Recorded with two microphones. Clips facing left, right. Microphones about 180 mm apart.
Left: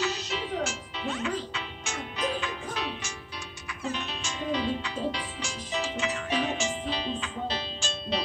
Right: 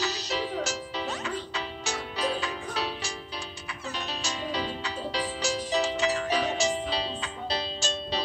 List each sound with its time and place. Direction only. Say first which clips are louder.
0.0 s music: right 1 dB; 35° right (ahead or behind)